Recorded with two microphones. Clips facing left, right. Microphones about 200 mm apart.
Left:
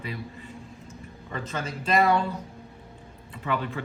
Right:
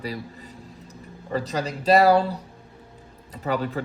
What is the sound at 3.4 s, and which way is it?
Speech, 40° right (ahead or behind).